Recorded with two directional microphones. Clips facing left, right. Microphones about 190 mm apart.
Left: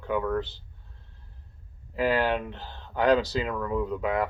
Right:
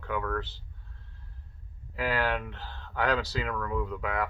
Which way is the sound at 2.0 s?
20° left (ahead or behind).